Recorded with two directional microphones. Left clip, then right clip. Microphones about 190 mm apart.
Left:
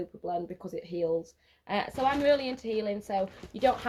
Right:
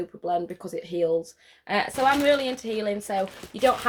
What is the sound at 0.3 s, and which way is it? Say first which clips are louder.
Speech: right 7 dB; 20° right (ahead or behind).